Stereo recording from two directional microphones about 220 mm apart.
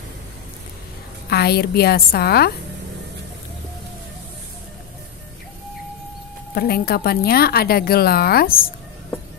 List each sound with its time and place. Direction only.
1.3 s a woman's voice: 45° left (ahead or behind)
6.5 s a woman's voice: 45° left (ahead or behind)